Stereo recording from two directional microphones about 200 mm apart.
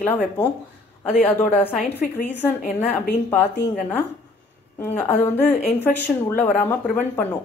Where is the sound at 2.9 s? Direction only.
10° left (ahead or behind).